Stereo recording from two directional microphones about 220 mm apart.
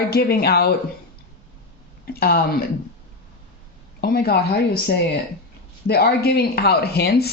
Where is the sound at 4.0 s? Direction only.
45° left (ahead or behind).